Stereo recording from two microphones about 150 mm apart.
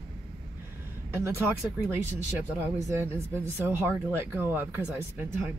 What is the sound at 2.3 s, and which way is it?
Speech, 15° right (ahead or behind).